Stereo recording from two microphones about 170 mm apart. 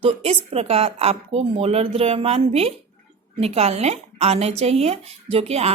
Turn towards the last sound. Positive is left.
turn(degrees=-35)  # may be behind; listen again after turning